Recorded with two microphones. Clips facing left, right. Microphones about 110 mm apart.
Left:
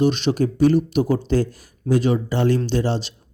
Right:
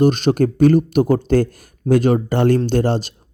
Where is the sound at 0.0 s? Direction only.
50° right (ahead or behind).